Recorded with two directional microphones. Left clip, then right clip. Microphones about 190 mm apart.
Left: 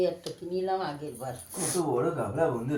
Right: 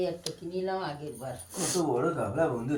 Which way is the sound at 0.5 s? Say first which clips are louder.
Left 3 dB; 40° left (ahead or behind).